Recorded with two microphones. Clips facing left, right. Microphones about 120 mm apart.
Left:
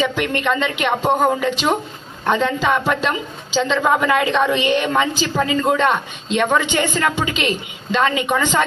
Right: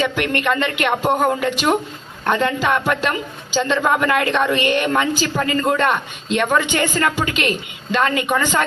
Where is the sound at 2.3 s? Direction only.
Centre (ahead or behind).